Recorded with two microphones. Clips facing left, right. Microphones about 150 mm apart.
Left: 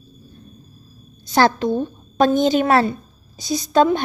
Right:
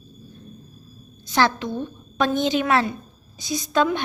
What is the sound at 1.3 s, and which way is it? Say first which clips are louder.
A woman's voice: left 5 dB; 40° left (ahead or behind).